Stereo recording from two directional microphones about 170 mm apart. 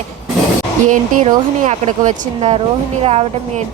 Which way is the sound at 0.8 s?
45° right (ahead or behind).